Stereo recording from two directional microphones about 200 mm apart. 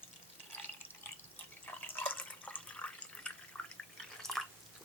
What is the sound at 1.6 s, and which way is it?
Water, 10° left (ahead or behind).